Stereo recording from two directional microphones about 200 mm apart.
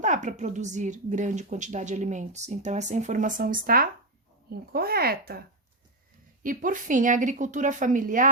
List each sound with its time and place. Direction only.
0.0 s a woman's voice: 40° right (ahead or behind)
6.4 s a woman's voice: 40° right (ahead or behind)